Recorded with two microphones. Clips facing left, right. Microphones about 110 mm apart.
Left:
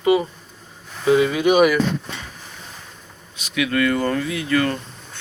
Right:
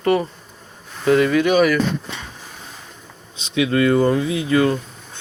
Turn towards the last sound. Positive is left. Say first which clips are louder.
# right 3 dB
turn(degrees=-20)  # may be behind; listen again after turning